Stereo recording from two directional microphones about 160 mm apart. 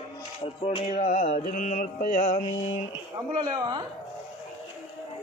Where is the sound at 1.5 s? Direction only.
50° left (ahead or behind).